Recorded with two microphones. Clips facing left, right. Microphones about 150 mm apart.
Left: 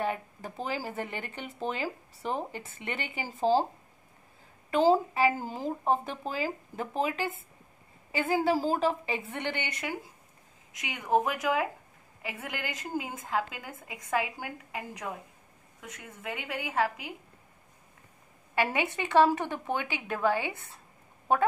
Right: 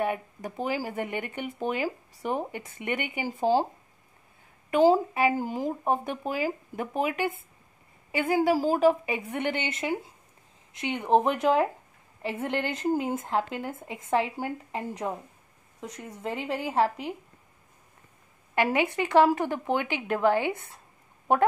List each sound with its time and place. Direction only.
0.0 s speech: 15° right (ahead or behind)
4.6 s a woman's voice: 15° right (ahead or behind); by 16.9 s 30° right (ahead or behind)
19.1 s speech: 10° right (ahead or behind)